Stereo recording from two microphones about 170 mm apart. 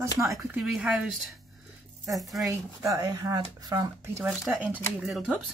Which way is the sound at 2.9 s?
20° right (ahead or behind).